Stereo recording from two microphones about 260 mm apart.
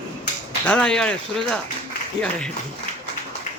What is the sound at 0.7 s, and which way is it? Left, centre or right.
Speech, centre.